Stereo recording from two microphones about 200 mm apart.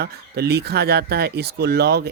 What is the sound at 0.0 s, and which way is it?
Speech, 55° right (ahead or behind).